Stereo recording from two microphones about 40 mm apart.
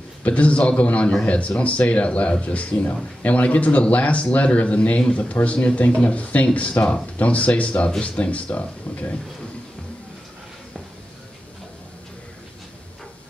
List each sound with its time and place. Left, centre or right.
0.2 s speech: left